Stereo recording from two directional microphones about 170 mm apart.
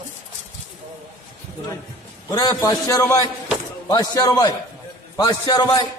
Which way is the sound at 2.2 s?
20° left (ahead or behind).